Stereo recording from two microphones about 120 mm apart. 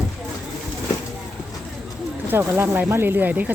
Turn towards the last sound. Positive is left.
turn(degrees=-15)  # may be behind; listen again after turning